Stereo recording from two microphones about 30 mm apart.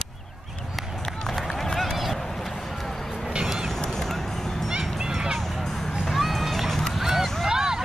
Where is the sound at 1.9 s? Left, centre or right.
Centre.